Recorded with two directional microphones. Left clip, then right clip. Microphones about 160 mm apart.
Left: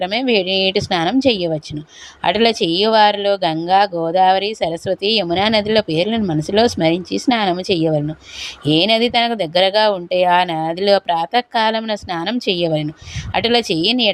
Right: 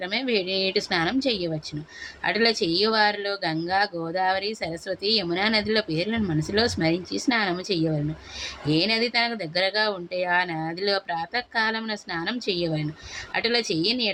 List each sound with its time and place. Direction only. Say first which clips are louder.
0.0 s speech: left 9 dB; 40° left (ahead or behind)